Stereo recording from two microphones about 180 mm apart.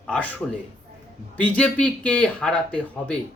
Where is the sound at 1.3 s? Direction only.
5° left (ahead or behind).